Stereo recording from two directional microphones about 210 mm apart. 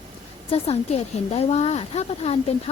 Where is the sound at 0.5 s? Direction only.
30° left (ahead or behind).